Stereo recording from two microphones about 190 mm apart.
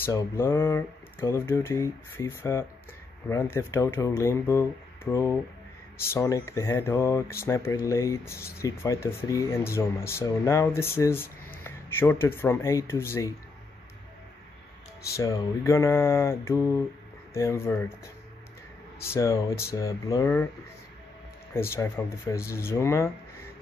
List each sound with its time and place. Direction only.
0.0 s speech: 15° left (ahead or behind)
15.1 s speech: 15° left (ahead or behind)
19.0 s speech: 15° left (ahead or behind)
21.5 s speech: 15° left (ahead or behind)